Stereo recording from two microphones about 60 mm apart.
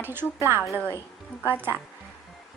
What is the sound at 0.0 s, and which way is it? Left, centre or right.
Speech, right.